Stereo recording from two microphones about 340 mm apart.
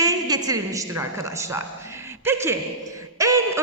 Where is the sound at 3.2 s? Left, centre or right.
Centre.